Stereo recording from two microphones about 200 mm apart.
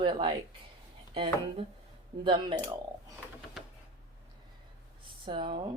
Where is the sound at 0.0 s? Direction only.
25° right (ahead or behind).